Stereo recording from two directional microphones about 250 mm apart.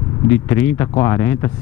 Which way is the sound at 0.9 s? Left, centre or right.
Centre.